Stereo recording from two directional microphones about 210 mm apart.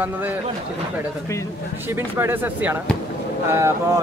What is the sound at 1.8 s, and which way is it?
Speech, 10° right (ahead or behind).